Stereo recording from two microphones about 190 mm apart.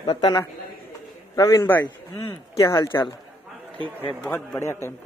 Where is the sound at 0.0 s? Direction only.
25° left (ahead or behind).